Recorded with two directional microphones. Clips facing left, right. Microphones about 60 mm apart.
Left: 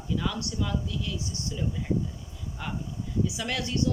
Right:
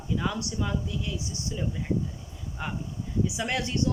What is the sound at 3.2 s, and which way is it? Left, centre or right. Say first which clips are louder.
Speech: right 2 dB; right.